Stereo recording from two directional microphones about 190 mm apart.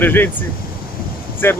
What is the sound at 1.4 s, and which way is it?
Speech, 10° left (ahead or behind).